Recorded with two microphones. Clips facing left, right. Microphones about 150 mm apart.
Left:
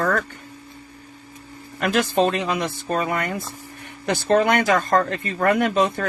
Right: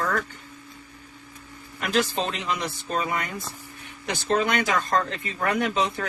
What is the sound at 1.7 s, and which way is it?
Speech, 55° left (ahead or behind).